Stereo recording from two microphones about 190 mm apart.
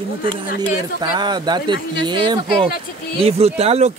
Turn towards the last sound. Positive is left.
turn(degrees=-30)  # may be behind; listen again after turning